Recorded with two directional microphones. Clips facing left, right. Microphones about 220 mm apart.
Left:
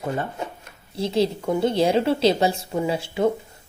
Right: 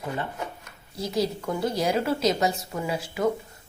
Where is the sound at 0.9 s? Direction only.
25° left (ahead or behind).